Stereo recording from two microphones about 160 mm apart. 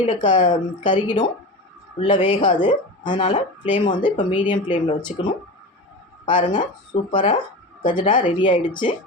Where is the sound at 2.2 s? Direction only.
30° left (ahead or behind).